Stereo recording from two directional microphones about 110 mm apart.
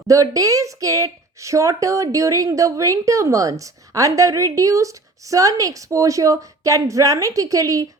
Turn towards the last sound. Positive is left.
turn(degrees=-30)  # may be behind; listen again after turning